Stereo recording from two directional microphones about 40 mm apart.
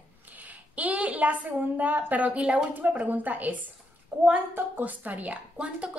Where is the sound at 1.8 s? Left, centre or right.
Right.